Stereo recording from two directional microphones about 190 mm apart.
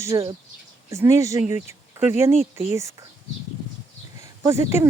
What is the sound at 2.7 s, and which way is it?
Speech, 15° right (ahead or behind).